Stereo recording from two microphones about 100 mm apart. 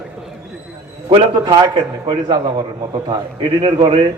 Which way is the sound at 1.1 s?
60° right (ahead or behind).